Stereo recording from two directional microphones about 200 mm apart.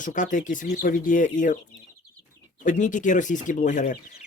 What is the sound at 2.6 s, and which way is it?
Speech, 40° left (ahead or behind).